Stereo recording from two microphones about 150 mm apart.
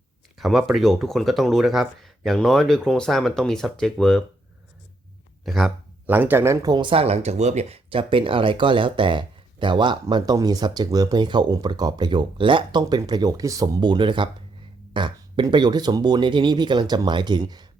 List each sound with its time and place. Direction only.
0.3 s speech: centre (ahead or behind)
5.5 s speech: centre (ahead or behind)
6.1 s speech: 10° right (ahead or behind); by 17.7 s 30° right (ahead or behind)